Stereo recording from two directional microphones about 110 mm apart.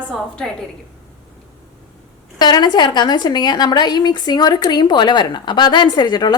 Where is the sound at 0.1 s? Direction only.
5° left (ahead or behind).